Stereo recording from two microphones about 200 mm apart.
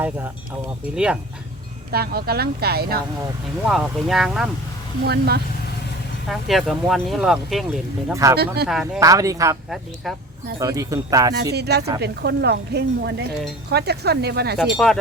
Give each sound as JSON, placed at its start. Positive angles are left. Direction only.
{"t": 0.9, "sound": "speech", "side_deg": -5}
{"t": 1.9, "sound": "speech", "side_deg": -50}
{"t": 3.7, "sound": "speech", "side_deg": 0}
{"t": 5.0, "sound": "speech", "side_deg": -50}
{"t": 6.2, "sound": "speech", "side_deg": 0}
{"t": 8.1, "sound": "speech", "side_deg": -15}
{"t": 8.6, "sound": "speech", "side_deg": 0}
{"t": 9.0, "sound": "speech", "side_deg": -15}
{"t": 9.6, "sound": "speech", "side_deg": 0}
{"t": 10.6, "sound": "speech", "side_deg": -15}
{"t": 11.5, "sound": "speech", "side_deg": -55}
{"t": 14.8, "sound": "speech", "side_deg": 5}